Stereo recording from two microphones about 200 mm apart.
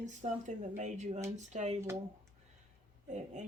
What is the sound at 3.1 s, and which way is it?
Speech, 35° right (ahead or behind).